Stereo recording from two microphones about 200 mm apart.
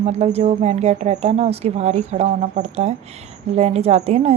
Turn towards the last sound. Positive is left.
turn(degrees=-30)  # may be behind; listen again after turning